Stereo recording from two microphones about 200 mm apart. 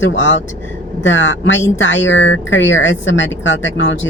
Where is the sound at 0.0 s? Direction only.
65° left (ahead or behind).